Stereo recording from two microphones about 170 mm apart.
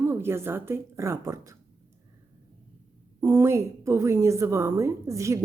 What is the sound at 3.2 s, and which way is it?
A woman's voice, 15° right (ahead or behind).